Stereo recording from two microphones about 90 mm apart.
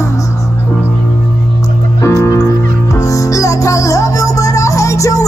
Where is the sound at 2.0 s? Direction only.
35° left (ahead or behind).